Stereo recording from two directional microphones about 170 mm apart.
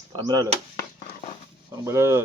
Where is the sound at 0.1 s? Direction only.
20° right (ahead or behind).